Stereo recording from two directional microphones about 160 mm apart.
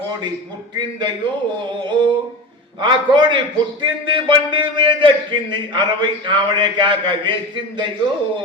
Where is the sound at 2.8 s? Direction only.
30° right (ahead or behind).